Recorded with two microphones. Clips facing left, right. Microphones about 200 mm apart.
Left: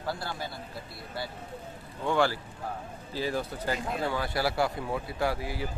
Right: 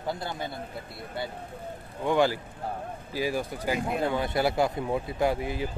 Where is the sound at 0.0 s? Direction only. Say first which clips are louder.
Right 2 dB; 20° right (ahead or behind).